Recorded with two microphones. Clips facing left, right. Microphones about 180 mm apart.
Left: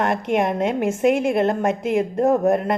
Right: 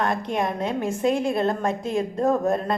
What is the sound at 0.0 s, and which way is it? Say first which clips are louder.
A woman's voice: left 4 dB; 20° left (ahead or behind).